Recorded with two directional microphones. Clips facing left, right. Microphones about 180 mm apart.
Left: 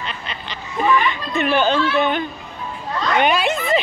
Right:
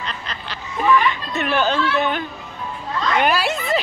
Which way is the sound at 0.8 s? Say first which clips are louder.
Right 1 dB; centre (ahead or behind).